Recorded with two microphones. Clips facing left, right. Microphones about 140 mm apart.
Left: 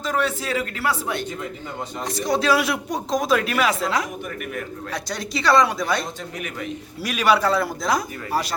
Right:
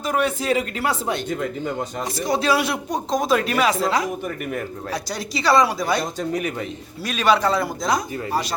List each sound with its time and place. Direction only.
0.0 s speech: 15° right (ahead or behind)
2.2 s speech: centre (ahead or behind)
5.3 s speech: centre (ahead or behind)
7.0 s speech: 10° left (ahead or behind)